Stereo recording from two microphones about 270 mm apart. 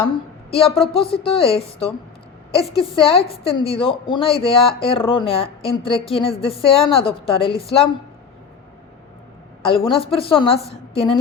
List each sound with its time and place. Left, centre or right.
0.5 s speech: left
9.6 s speech: centre